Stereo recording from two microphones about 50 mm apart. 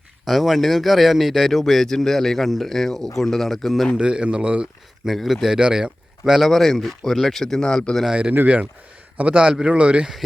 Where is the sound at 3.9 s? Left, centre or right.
Centre.